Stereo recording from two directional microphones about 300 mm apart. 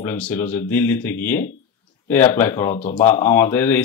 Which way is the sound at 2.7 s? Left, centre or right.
Left.